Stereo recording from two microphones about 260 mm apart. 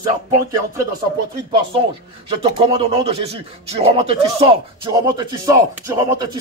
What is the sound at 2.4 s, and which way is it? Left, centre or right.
Speech, centre.